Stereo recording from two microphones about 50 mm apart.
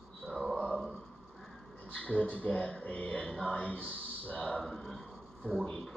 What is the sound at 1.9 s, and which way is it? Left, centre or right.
Speech, left.